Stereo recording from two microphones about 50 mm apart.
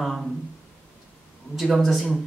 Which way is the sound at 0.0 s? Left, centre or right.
Centre.